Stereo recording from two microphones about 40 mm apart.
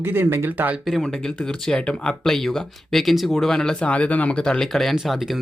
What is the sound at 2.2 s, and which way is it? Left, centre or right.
Speech, centre.